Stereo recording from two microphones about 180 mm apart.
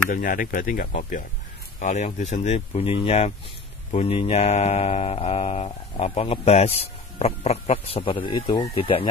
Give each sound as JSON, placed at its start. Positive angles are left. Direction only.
{"t": 0.1, "sound": "speech", "side_deg": 50}